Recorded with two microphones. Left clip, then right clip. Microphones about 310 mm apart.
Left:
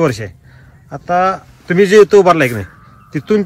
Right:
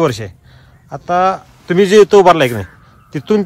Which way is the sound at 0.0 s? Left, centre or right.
Centre.